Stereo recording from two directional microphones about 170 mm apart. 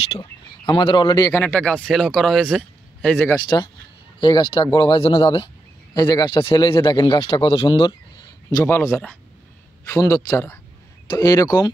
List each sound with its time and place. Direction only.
0.2 s speech: 25° left (ahead or behind); by 3.3 s 10° left (ahead or behind)
3.4 s a man's voice: 25° left (ahead or behind)
8.6 s a man's voice: 15° left (ahead or behind)